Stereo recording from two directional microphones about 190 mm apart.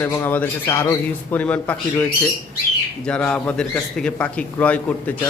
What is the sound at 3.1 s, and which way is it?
Speech, 5° left (ahead or behind).